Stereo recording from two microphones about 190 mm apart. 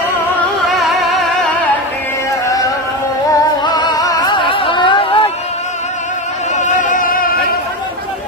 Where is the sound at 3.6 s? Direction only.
20° left (ahead or behind).